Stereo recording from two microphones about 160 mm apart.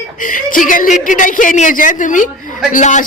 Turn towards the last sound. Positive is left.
turn(degrees=50)  # may be behind; listen again after turning